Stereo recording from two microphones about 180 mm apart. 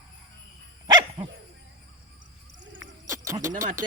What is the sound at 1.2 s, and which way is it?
Dog, 30° right (ahead or behind).